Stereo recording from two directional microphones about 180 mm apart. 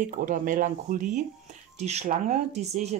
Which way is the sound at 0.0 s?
45° right (ahead or behind).